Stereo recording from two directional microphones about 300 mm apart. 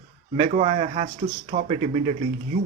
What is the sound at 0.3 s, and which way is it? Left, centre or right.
Speech, right.